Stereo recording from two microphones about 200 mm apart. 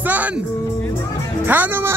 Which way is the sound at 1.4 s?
10° right (ahead or behind).